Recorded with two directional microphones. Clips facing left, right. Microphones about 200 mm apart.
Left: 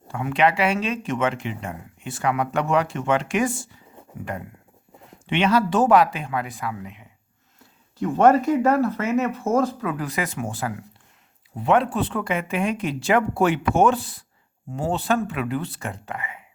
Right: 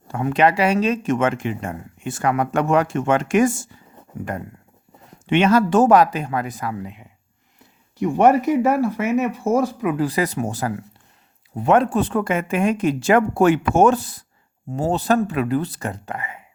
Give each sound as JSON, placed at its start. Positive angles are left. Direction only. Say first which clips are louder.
{"t": 0.1, "sound": "speech", "louder": "right 3 dB", "side_deg": -40}
{"t": 7.9, "sound": "speech", "louder": "right 1 dB", "side_deg": -15}
{"t": 10.0, "sound": "speech", "louder": "right 6 dB", "side_deg": -35}